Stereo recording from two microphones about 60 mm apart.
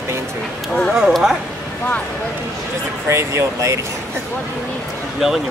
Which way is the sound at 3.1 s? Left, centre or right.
Right.